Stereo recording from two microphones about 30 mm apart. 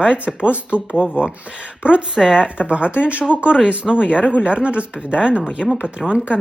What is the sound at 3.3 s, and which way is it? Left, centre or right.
Speech, right.